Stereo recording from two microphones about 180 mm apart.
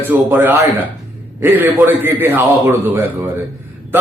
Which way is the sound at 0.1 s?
10° right (ahead or behind).